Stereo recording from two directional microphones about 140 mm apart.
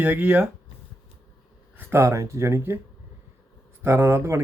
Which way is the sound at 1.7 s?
15° right (ahead or behind).